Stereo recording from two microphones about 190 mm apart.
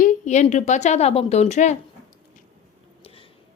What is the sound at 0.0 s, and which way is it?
A woman's voice, 40° left (ahead or behind).